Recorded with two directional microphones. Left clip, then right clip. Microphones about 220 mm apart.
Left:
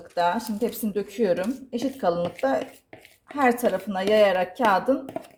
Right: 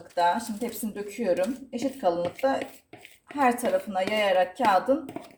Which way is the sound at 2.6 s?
5° left (ahead or behind).